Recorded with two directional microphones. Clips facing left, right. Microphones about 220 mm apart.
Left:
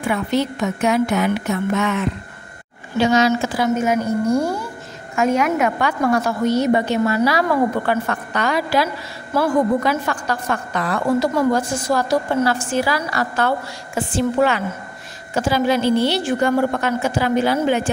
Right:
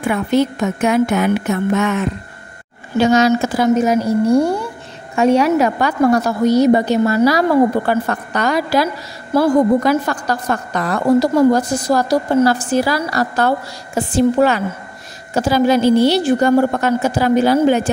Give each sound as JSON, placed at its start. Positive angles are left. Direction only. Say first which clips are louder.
{"t": 0.1, "sound": "a woman's voice", "louder": "right 5 dB", "side_deg": -50}